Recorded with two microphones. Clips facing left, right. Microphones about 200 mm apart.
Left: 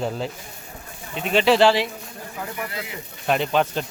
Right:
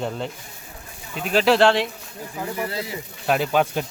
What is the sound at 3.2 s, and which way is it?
Speech, 5° right (ahead or behind).